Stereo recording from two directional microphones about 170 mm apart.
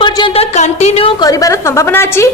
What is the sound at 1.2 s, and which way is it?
A woman's voice, 20° left (ahead or behind).